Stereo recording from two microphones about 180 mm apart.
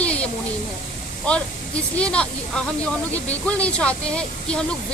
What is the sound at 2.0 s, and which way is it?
Speech, 5° left (ahead or behind).